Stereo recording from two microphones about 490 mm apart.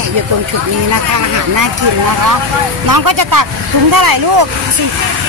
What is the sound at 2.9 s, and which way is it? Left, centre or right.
Speech, right.